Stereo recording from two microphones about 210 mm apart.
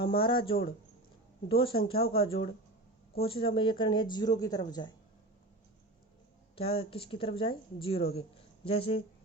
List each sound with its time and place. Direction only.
0.0 s speech: 25° left (ahead or behind)
6.6 s speech: 25° left (ahead or behind)